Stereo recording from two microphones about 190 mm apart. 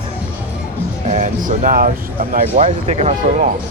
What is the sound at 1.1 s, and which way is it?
Speech, 40° right (ahead or behind).